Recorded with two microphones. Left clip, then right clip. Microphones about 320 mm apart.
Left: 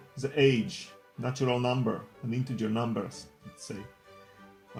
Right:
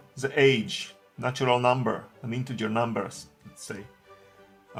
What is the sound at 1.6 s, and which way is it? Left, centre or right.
Speech, right.